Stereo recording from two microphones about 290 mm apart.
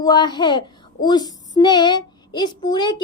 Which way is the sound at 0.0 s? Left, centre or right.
Centre.